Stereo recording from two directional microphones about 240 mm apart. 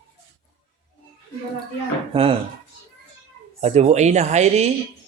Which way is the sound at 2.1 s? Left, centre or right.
Right.